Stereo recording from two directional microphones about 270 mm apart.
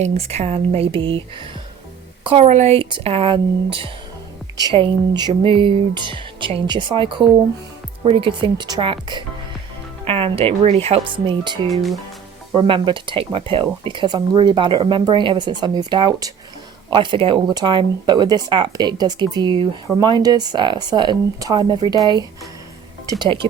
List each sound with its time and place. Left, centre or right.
0.0 s speech: right
2.2 s speech: right
11.7 s speech: centre
12.5 s speech: centre